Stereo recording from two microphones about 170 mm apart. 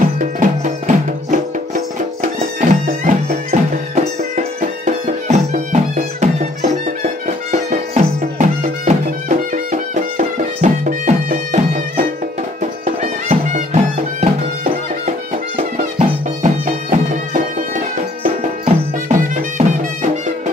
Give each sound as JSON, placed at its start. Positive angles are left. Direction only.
{"t": 0.2, "sound": "music", "side_deg": -50}
{"t": 18.2, "sound": "music", "side_deg": -35}
{"t": 19.1, "sound": "music", "side_deg": -50}